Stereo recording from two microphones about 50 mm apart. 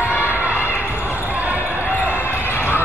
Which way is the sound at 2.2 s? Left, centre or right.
Left.